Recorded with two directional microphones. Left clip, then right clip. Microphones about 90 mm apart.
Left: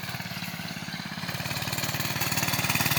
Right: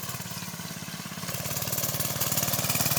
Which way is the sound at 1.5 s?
25° right (ahead or behind).